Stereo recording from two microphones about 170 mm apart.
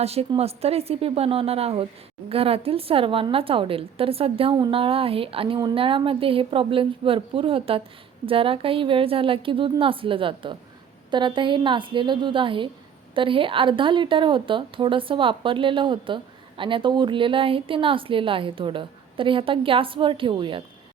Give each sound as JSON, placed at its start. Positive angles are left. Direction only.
{"t": 0.0, "sound": "a woman's voice", "side_deg": -35}